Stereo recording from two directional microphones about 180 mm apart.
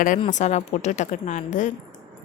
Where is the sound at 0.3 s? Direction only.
40° left (ahead or behind).